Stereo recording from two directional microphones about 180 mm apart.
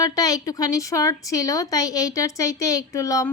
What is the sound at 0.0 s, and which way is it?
Speech, 20° left (ahead or behind).